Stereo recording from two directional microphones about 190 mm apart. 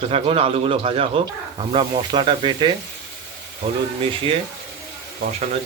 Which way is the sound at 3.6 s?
40° right (ahead or behind).